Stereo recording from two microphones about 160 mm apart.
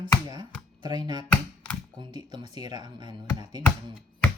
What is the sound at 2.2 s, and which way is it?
Speech, 30° right (ahead or behind).